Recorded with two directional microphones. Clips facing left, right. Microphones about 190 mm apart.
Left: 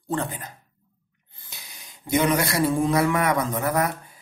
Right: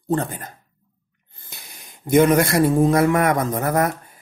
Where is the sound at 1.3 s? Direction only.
50° right (ahead or behind).